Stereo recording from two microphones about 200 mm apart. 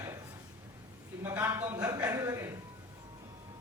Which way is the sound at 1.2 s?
10° right (ahead or behind).